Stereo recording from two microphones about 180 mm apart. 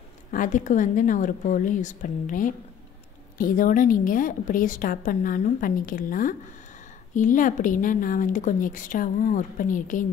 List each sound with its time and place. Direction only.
0.3 s a woman's voice: 45° left (ahead or behind)